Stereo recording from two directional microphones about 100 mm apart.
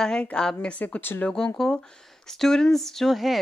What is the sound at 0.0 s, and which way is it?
A woman's voice, 10° left (ahead or behind).